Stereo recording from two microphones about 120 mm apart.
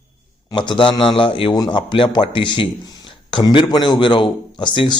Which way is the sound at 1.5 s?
35° left (ahead or behind).